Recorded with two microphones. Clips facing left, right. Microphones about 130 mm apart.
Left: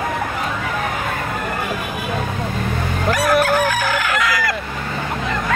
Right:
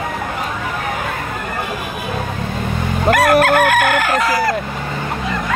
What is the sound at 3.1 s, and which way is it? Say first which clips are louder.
Chicken: right 4 dB; 65° right (ahead or behind).